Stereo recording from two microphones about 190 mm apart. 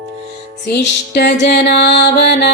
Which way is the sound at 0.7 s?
60° left (ahead or behind).